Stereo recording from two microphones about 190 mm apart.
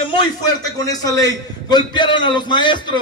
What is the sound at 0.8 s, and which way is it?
A man's voice, 20° left (ahead or behind).